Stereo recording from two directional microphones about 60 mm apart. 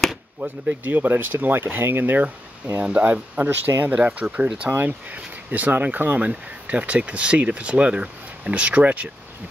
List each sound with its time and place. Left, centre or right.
0.4 s speech: right
4.6 s speech: right